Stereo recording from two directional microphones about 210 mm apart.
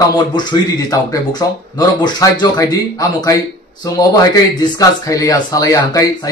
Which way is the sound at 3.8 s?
15° left (ahead or behind).